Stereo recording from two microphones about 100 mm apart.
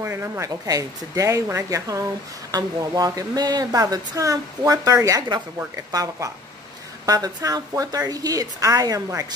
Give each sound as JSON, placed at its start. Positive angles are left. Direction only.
{"t": 0.0, "sound": "a woman's voice", "side_deg": -25}